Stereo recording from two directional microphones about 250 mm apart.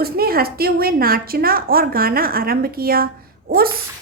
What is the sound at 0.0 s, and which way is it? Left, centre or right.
A woman's voice, right.